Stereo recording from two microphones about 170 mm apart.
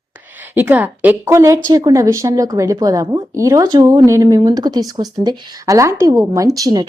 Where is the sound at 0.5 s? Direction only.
10° right (ahead or behind).